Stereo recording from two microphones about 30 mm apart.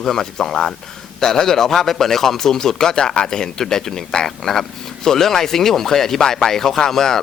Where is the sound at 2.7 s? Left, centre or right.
Left.